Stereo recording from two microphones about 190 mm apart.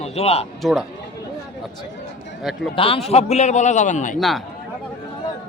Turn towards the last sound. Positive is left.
turn(degrees=0)  # may be behind; listen again after turning